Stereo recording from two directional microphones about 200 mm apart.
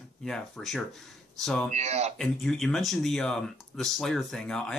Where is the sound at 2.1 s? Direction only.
Centre (ahead or behind).